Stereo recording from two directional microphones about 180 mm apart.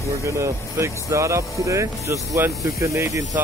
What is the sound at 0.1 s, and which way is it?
Speech, 15° right (ahead or behind).